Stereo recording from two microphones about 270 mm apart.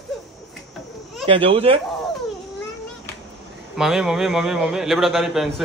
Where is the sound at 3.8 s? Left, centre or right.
Centre.